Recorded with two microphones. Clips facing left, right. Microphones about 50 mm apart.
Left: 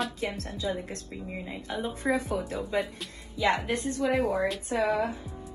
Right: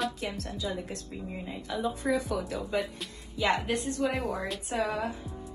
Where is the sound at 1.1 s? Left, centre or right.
Left.